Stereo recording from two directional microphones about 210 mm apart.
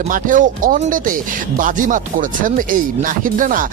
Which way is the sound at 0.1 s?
40° right (ahead or behind).